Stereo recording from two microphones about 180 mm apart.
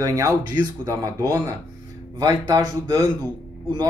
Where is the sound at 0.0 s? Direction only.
15° right (ahead or behind).